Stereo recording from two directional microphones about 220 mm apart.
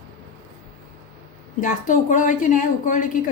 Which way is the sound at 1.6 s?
35° left (ahead or behind).